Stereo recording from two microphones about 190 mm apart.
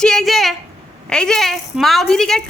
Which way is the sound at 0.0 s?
Centre (ahead or behind).